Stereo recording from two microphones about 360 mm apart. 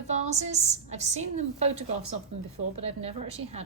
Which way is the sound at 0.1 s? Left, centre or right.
Centre.